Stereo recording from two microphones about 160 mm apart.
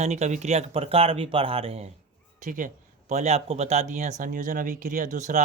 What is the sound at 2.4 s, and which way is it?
Speech, 55° right (ahead or behind).